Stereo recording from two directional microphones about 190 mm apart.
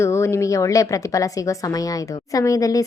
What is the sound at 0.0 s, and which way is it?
Speech, 15° left (ahead or behind).